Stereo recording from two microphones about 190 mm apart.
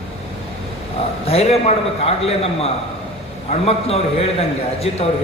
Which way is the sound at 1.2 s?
30° left (ahead or behind).